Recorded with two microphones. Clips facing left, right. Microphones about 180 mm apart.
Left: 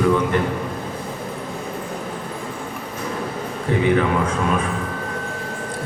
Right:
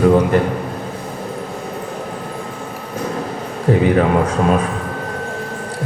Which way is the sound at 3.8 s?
40° right (ahead or behind).